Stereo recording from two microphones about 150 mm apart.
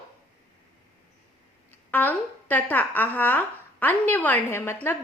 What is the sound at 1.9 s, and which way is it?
A woman's voice, 10° left (ahead or behind).